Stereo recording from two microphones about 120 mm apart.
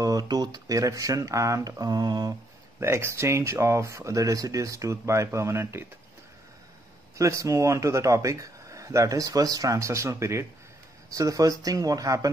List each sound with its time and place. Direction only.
0.0 s speech: 30° right (ahead or behind)
2.8 s speech: 20° right (ahead or behind)
7.2 s speech: 25° right (ahead or behind)